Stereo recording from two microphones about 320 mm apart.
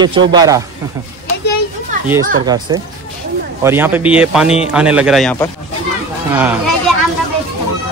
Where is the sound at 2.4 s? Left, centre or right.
Centre.